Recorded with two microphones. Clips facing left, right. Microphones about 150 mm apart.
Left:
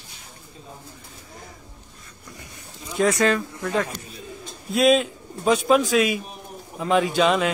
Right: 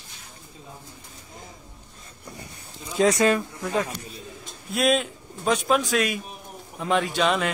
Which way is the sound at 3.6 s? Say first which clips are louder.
Left 1 dB; centre (ahead or behind).